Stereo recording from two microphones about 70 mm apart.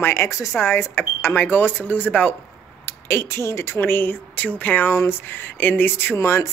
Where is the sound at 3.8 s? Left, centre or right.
Left.